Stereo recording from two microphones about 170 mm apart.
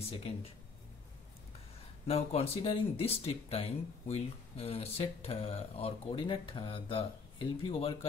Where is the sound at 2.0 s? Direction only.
35° left (ahead or behind).